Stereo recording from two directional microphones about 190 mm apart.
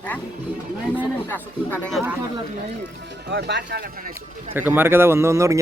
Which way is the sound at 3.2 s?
65° right (ahead or behind).